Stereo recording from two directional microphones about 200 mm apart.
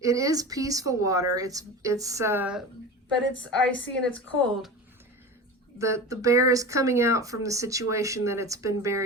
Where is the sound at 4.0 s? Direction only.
5° left (ahead or behind).